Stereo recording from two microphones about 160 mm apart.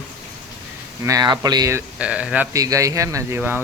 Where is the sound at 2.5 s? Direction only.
20° right (ahead or behind).